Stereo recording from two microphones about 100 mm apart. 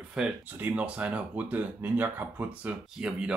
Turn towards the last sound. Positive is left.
turn(degrees=-10)  # may be behind; listen again after turning